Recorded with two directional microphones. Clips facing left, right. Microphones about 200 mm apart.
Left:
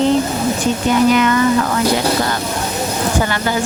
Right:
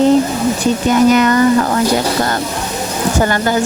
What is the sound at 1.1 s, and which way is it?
Speech, 40° right (ahead or behind).